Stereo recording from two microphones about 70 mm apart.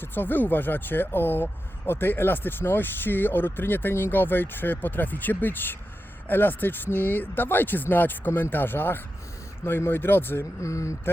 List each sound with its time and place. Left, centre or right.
0.0 s speech: left
10.6 s speech: left